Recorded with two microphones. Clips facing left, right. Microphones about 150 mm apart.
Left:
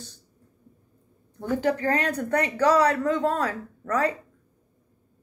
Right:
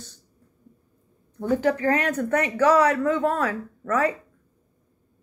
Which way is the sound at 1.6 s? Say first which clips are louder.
Even; 35° left (ahead or behind).